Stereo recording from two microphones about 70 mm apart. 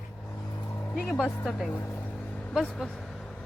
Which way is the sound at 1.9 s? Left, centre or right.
Left.